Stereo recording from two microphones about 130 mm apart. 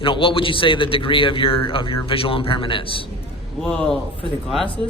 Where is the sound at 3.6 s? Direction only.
5° left (ahead or behind).